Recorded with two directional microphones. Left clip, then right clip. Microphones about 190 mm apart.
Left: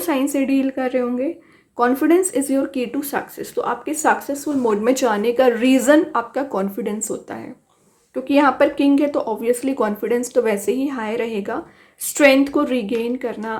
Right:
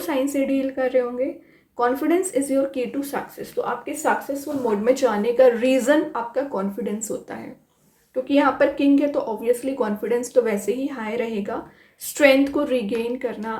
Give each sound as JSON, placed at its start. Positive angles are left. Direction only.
{"t": 0.0, "sound": "speech", "side_deg": 35}
{"t": 8.1, "sound": "a woman's voice", "side_deg": 35}